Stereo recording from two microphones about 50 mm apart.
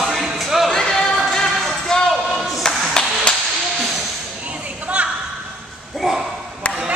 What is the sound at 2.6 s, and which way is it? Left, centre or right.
Clapping, centre.